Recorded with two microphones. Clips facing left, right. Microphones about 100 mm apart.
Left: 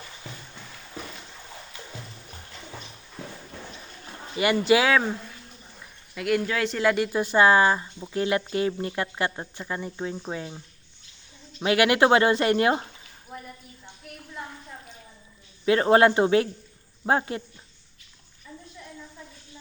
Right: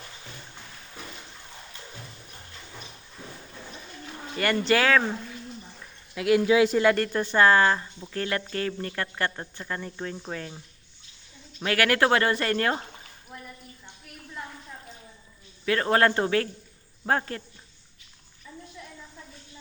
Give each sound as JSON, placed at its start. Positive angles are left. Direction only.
{"t": 4.4, "sound": "speech", "side_deg": 10}
{"t": 6.1, "sound": "speech", "side_deg": 0}
{"t": 11.6, "sound": "speech", "side_deg": 15}
{"t": 13.3, "sound": "a sound", "side_deg": 5}
{"t": 15.6, "sound": "speech", "side_deg": 20}